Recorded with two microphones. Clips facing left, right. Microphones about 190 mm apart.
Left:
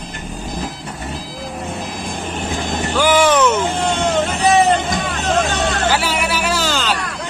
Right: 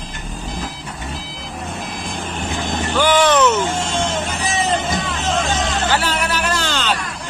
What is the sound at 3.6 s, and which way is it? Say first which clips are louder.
Music: left 3 dB; 60° left (ahead or behind).